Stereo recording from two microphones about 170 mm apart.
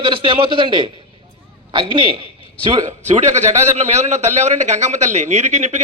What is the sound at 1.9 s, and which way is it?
Speech, 30° right (ahead or behind).